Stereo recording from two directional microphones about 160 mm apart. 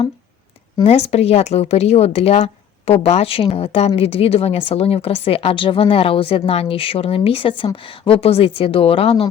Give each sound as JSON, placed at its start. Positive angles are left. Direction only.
{"t": 0.9, "sound": "a woman's voice", "side_deg": 40}